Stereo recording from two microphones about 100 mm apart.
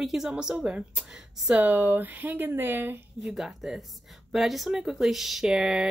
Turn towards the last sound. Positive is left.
turn(degrees=-10)  # may be behind; listen again after turning